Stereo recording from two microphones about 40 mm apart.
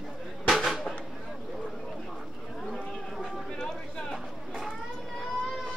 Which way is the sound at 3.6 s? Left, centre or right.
Left.